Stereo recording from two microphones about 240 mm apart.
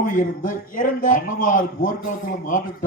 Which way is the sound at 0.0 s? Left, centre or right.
Left.